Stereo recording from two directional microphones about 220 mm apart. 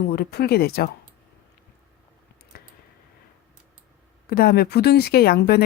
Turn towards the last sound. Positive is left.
turn(degrees=45)  # may be behind; listen again after turning